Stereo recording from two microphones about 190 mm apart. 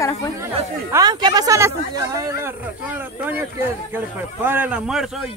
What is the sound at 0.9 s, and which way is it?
Speech, 20° right (ahead or behind).